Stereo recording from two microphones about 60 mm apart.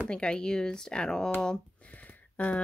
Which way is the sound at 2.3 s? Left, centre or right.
Left.